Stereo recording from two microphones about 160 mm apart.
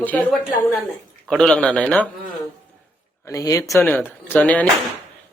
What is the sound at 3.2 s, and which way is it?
Speech, 20° left (ahead or behind).